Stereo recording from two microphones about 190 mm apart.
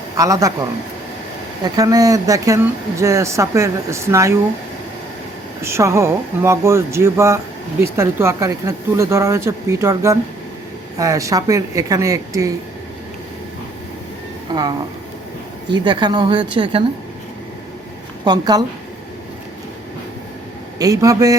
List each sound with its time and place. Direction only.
0.2 s speech: 15° right (ahead or behind)
5.6 s speech: 15° right (ahead or behind)
14.5 s speech: 20° right (ahead or behind)
18.3 s speech: 20° right (ahead or behind)
20.7 s speech: 20° right (ahead or behind)